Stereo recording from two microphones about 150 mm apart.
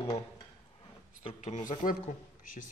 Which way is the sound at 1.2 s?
50° left (ahead or behind).